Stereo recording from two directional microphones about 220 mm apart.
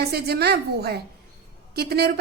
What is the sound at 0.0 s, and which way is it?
A woman's voice, 45° right (ahead or behind).